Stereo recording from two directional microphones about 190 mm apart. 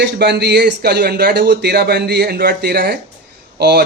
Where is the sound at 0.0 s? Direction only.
60° right (ahead or behind).